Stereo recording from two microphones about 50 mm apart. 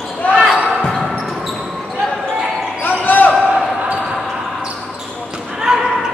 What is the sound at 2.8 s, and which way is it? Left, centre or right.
Basketball bounce, left.